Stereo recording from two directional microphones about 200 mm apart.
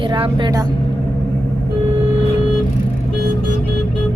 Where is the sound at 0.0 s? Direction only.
25° right (ahead or behind).